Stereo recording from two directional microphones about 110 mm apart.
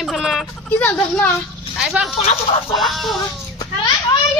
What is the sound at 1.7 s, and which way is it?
Speech, 5° right (ahead or behind).